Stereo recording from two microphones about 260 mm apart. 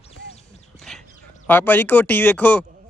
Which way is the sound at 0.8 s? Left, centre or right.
Centre.